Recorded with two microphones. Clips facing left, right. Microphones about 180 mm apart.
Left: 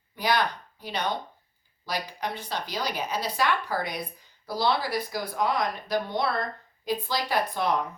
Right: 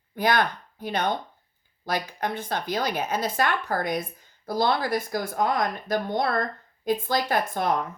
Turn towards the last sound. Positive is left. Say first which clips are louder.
# right 2 dB
turn(degrees=-50)  # may be behind; listen again after turning